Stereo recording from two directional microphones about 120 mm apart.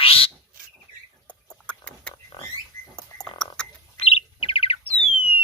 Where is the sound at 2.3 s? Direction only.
50° left (ahead or behind).